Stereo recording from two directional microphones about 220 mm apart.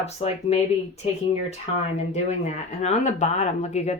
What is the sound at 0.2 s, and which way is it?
Speech, 25° left (ahead or behind).